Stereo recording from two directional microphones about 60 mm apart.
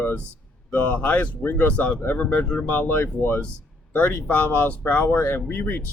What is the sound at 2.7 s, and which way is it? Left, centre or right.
Speech, left.